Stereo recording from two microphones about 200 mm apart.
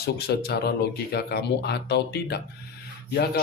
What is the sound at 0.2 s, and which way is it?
Speech, 55° left (ahead or behind).